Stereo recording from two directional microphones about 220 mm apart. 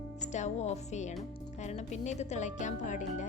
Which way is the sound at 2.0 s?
30° left (ahead or behind).